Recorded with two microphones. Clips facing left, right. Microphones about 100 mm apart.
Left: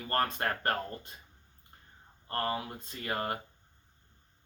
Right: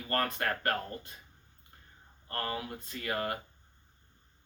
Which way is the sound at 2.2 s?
25° left (ahead or behind).